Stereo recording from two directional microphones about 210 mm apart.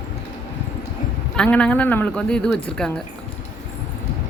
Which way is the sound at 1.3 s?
5° left (ahead or behind).